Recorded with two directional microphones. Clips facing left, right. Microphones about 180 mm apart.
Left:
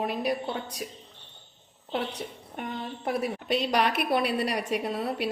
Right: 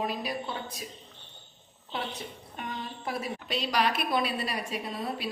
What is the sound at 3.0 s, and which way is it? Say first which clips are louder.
A woman's voice: left 6 dB; 60° left (ahead or behind).